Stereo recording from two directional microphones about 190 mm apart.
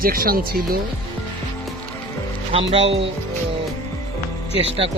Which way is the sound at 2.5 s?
30° right (ahead or behind).